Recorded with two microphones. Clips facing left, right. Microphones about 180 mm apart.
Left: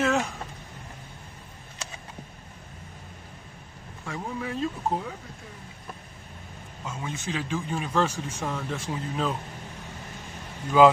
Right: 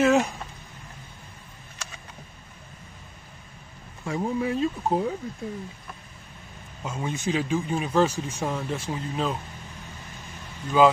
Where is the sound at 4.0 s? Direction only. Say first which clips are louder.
Right 7 dB; 25° right (ahead or behind).